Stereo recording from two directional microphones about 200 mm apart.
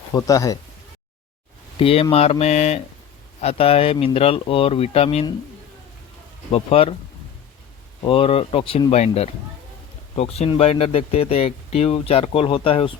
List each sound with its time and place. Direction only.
0.1 s speech: 15° left (ahead or behind)
1.8 s speech: 30° left (ahead or behind)
6.5 s speech: 30° left (ahead or behind)
8.0 s speech: 30° left (ahead or behind)